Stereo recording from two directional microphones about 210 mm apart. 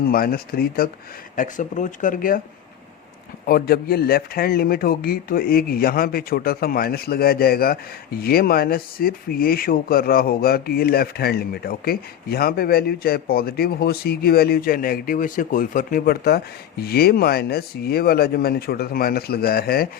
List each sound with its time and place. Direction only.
0.1 s speech: 45° left (ahead or behind)
3.4 s speech: 45° left (ahead or behind)